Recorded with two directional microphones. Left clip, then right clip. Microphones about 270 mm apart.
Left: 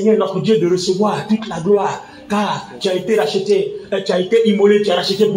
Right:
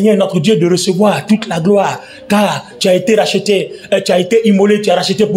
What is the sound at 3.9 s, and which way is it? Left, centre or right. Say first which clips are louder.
Speech: right 5 dB; right.